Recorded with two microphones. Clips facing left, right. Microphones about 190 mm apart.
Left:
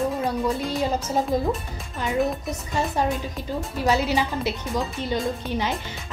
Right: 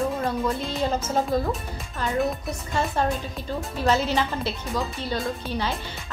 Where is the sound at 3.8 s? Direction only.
15° left (ahead or behind).